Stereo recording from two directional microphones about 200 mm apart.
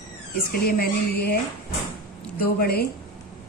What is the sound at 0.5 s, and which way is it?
Speech, 50° left (ahead or behind).